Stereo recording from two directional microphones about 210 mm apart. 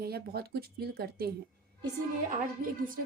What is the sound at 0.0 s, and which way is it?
A woman's voice, 45° right (ahead or behind).